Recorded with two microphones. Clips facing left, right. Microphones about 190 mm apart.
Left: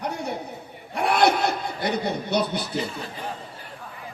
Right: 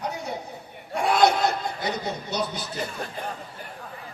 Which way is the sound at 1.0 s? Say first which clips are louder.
Even; 60° left (ahead or behind).